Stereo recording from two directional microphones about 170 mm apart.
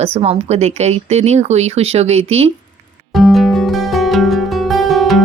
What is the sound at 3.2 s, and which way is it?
Music, centre (ahead or behind).